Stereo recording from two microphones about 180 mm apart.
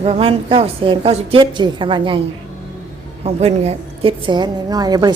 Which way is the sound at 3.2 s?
35° right (ahead or behind).